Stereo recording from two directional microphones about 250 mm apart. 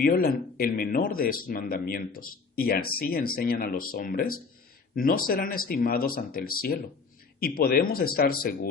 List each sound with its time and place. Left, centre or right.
0.0 s speech: left